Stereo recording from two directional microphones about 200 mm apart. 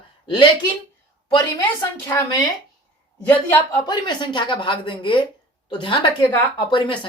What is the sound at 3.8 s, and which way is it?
Speech, 20° left (ahead or behind).